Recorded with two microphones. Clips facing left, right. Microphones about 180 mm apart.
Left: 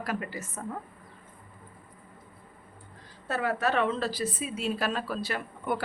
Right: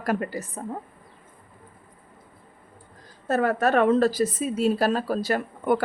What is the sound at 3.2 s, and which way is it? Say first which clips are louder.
A woman's voice: right 6 dB; 45° right (ahead or behind).